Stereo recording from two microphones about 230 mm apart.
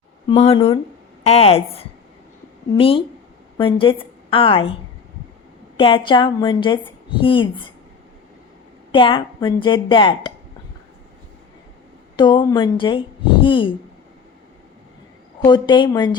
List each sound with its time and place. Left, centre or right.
0.3 s a woman's voice: left
5.7 s a woman's voice: left
8.9 s a woman's voice: left
12.1 s a woman's voice: centre
15.4 s a woman's voice: centre